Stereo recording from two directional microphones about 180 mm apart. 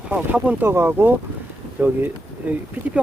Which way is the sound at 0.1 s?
10° right (ahead or behind).